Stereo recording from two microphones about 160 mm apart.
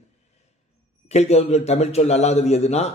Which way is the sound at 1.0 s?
45° left (ahead or behind).